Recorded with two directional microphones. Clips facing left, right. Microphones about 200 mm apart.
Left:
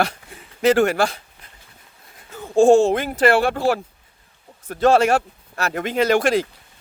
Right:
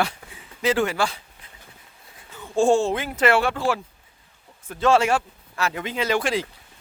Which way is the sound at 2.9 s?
35° left (ahead or behind).